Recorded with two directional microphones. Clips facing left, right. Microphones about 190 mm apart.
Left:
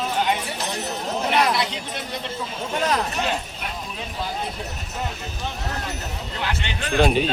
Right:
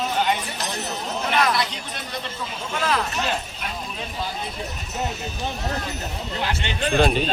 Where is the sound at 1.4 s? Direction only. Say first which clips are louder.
Even; 20° left (ahead or behind).